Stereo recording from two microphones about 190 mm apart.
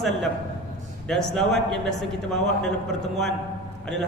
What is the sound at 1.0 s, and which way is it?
Speech, centre (ahead or behind).